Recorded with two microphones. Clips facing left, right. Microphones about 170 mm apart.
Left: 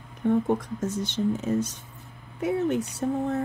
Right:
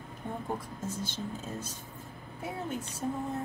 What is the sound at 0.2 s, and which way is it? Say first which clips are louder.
Speech: left 13 dB; 70° left (ahead or behind).